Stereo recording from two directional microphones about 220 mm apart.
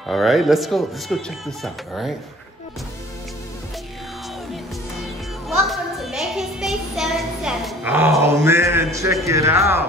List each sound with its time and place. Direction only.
0.1 s speech: centre (ahead or behind)
5.7 s music: centre (ahead or behind)